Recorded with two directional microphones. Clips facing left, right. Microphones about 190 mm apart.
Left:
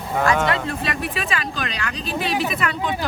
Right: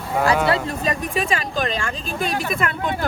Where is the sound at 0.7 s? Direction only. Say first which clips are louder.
Right 2 dB; 40° right (ahead or behind).